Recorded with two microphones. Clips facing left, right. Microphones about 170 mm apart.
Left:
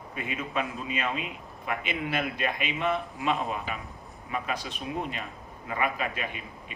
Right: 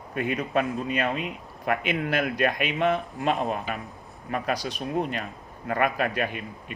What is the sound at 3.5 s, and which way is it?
Speech, 60° right (ahead or behind).